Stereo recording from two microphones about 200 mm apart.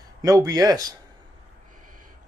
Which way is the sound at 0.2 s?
15° right (ahead or behind).